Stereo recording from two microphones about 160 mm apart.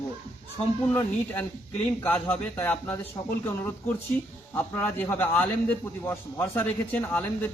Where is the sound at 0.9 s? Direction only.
10° left (ahead or behind).